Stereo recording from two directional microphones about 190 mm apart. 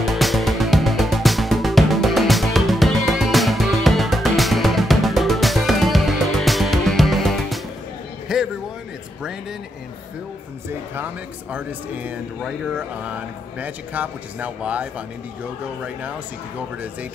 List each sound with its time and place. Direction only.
0.0 s music: centre (ahead or behind)
8.3 s a sound: centre (ahead or behind)
11.5 s speech: 5° right (ahead or behind)